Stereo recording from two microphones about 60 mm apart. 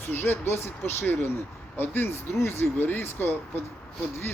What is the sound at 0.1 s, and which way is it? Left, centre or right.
Speech, left.